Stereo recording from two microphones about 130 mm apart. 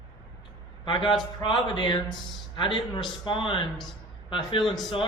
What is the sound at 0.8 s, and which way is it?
A man's voice, 35° left (ahead or behind).